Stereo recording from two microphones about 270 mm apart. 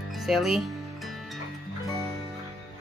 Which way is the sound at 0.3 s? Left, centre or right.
Centre.